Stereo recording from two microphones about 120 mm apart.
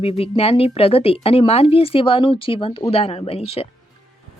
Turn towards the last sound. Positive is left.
turn(degrees=55)  # may be behind; listen again after turning